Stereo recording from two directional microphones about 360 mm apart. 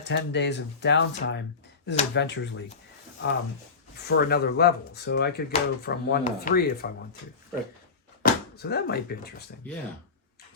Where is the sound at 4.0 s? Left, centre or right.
Left.